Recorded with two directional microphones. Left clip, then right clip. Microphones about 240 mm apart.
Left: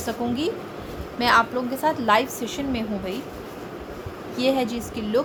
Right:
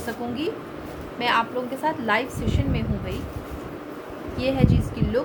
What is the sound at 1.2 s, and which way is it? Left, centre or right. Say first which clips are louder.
A woman's voice: left 3 dB; left.